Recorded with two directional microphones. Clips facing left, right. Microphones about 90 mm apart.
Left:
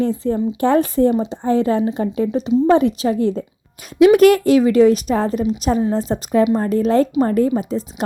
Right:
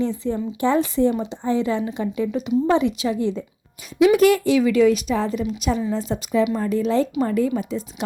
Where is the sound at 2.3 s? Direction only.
30° left (ahead or behind).